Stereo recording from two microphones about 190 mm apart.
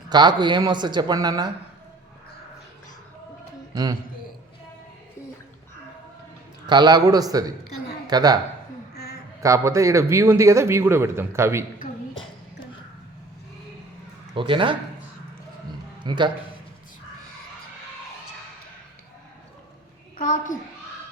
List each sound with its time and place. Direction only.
0.1 s speech: 20° right (ahead or behind)
6.7 s speech: 20° right (ahead or behind)
9.4 s a man's voice: 15° right (ahead or behind)
14.3 s speech: 25° right (ahead or behind)
16.0 s speech: 25° right (ahead or behind)
20.1 s a sound: 45° left (ahead or behind)